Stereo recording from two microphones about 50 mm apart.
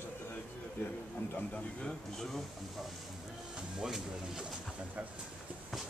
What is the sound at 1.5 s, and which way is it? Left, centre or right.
Speech, centre.